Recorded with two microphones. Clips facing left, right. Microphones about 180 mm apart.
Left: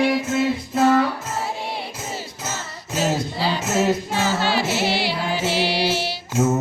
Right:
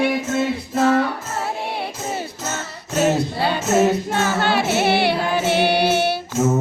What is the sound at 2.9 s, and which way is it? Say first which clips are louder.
Female singing: right 4 dB; 60° right (ahead or behind).